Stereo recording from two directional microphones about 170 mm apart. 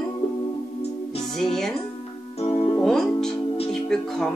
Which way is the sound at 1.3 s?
5° left (ahead or behind).